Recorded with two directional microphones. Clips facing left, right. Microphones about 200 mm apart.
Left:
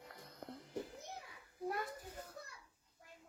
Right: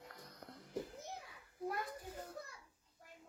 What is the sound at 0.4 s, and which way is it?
Music, 25° left (ahead or behind).